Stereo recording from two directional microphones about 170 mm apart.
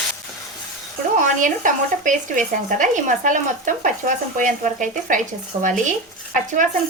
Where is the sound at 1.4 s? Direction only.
50° right (ahead or behind).